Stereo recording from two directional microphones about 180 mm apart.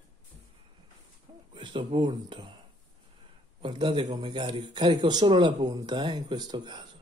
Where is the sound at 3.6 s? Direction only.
25° right (ahead or behind).